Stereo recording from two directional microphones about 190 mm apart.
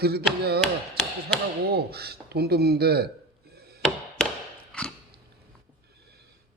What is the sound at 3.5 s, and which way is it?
Chop, 55° right (ahead or behind).